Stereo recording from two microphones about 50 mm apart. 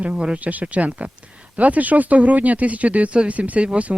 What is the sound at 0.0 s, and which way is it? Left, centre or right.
Speech, right.